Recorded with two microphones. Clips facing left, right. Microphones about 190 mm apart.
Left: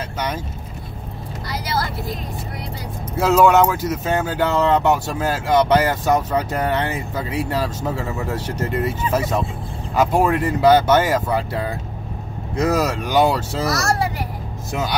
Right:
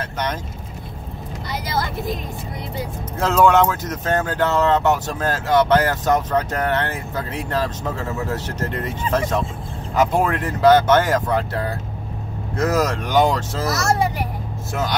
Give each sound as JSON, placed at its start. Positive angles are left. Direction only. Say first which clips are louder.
{"t": 0.0, "sound": "speech", "louder": "even", "side_deg": 10}
{"t": 3.2, "sound": "speech", "louder": "left 2 dB", "side_deg": 10}
{"t": 13.7, "sound": "a child's voice", "louder": "right 4 dB", "side_deg": -20}
{"t": 14.7, "sound": "speech", "louder": "even", "side_deg": 15}